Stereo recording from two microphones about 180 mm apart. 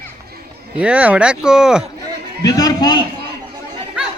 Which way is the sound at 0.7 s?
5° right (ahead or behind).